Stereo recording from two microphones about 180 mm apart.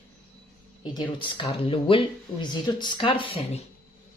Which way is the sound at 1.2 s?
25° left (ahead or behind).